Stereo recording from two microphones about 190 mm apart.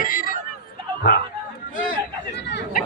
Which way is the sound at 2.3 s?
65° left (ahead or behind).